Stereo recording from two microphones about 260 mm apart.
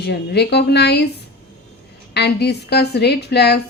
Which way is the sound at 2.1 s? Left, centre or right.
Left.